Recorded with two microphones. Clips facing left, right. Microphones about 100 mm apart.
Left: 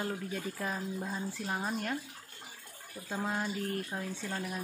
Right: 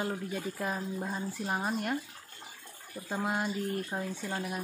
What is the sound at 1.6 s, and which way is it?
Speech, 5° right (ahead or behind).